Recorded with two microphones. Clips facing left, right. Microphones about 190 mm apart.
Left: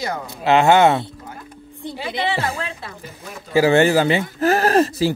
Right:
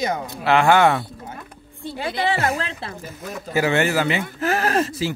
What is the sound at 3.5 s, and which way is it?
Speech, 30° left (ahead or behind).